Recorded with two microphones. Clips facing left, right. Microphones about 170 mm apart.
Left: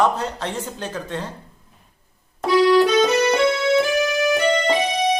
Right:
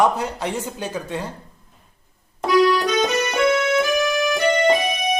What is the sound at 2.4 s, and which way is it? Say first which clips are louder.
Keyboard: left 2 dB; 30° left (ahead or behind).